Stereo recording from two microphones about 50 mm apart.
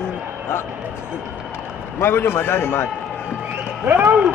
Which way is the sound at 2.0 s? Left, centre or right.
Left.